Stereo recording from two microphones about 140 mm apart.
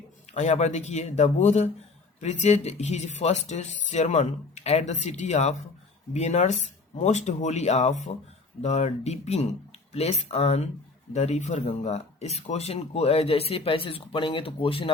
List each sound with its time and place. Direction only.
0.3 s speech: 55° left (ahead or behind)